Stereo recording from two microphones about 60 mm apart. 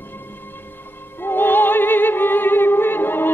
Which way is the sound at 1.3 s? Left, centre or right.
Left.